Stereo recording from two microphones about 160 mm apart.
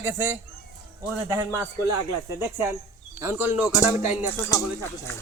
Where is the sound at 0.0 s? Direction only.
15° right (ahead or behind).